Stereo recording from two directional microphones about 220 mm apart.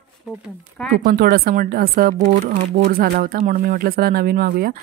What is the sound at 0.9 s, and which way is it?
Speech, 45° right (ahead or behind).